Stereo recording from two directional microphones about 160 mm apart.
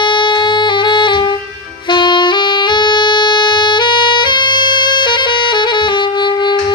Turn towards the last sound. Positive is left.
turn(degrees=30)  # may be behind; listen again after turning